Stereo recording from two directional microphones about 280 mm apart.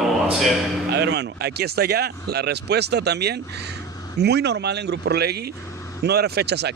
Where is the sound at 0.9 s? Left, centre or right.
Right.